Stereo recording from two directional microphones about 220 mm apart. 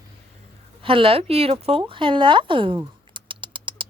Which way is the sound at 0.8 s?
25° right (ahead or behind).